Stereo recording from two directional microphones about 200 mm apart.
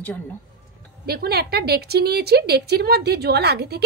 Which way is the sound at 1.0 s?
50° right (ahead or behind).